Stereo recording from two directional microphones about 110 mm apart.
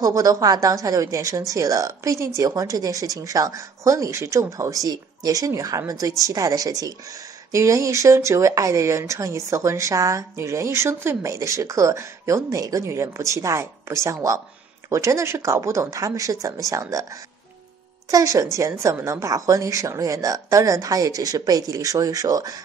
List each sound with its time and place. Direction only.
0.0 s speech: 35° right (ahead or behind)
18.1 s speech: 30° right (ahead or behind)